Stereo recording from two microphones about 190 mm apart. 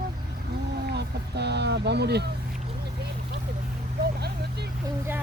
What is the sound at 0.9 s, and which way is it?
Speech, 60° right (ahead or behind).